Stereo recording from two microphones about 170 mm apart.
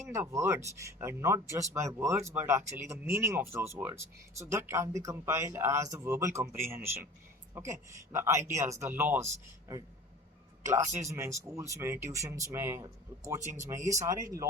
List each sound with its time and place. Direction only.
0.0 s speech: 15° right (ahead or behind)
11.1 s speech: 15° right (ahead or behind)